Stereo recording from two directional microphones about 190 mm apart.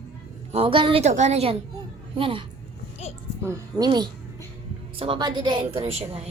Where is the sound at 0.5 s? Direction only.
30° right (ahead or behind).